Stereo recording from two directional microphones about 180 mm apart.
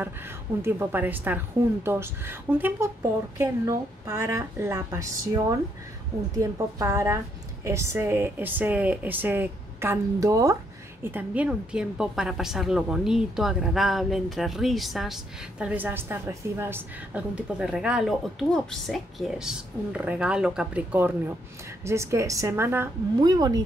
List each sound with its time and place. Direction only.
0.0 s a woman's voice: 10° right (ahead or behind)